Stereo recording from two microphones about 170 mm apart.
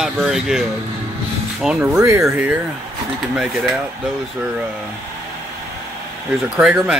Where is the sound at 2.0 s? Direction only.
15° right (ahead or behind).